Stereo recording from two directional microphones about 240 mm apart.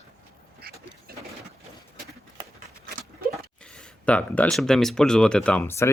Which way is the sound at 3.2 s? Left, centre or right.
Right.